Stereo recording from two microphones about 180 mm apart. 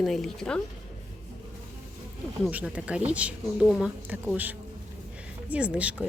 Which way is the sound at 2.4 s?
5° right (ahead or behind).